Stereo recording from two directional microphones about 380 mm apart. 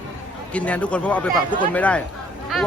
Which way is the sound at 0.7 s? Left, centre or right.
Centre.